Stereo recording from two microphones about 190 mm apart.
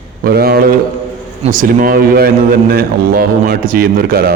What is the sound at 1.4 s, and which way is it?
A man's voice, 45° right (ahead or behind).